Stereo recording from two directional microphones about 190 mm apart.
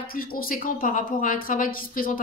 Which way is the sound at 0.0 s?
50° left (ahead or behind).